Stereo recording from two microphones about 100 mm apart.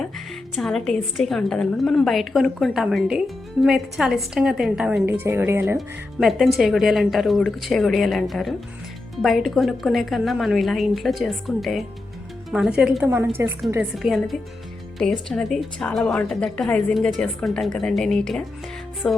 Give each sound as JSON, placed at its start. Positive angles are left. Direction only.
{"t": 0.5, "sound": "a woman's voice", "side_deg": 5}
{"t": 5.0, "sound": "a woman's voice", "side_deg": -25}
{"t": 5.7, "sound": "a woman's voice", "side_deg": 0}
{"t": 13.4, "sound": "a woman's voice", "side_deg": -30}
{"t": 14.0, "sound": "a woman's voice", "side_deg": 0}
{"t": 19.0, "sound": "music", "side_deg": 15}